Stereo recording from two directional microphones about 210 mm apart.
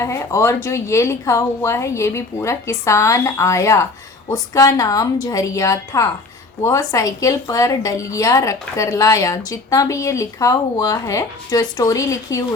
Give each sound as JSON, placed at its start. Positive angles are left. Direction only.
{"t": 0.0, "sound": "a woman's voice", "side_deg": 15}